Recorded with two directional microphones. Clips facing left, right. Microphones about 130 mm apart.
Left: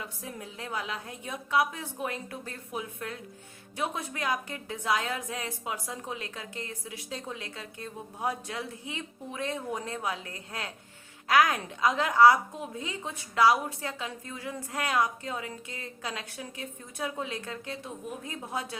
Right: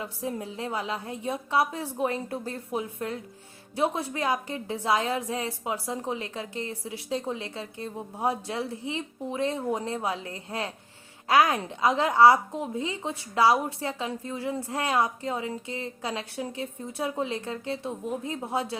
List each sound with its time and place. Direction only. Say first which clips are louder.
0.0 s a woman's voice: right 7 dB; 25° right (ahead or behind)